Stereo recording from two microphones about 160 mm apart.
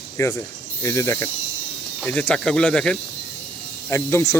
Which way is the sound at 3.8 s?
20° left (ahead or behind).